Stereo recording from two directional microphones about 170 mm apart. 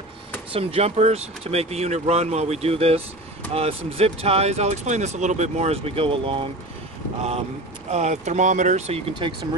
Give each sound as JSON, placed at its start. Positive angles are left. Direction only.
{"t": 0.5, "sound": "speech", "side_deg": -35}